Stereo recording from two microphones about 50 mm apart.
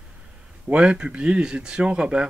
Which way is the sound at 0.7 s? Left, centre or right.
Right.